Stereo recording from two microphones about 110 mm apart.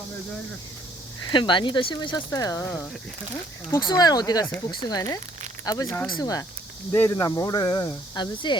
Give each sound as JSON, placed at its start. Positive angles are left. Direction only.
{"t": 1.3, "sound": "speech", "side_deg": 45}